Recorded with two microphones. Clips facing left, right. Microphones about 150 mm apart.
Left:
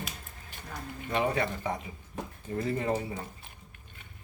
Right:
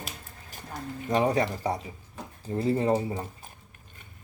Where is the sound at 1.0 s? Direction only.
35° right (ahead or behind).